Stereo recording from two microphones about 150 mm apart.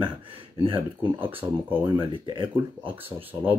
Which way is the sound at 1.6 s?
15° right (ahead or behind).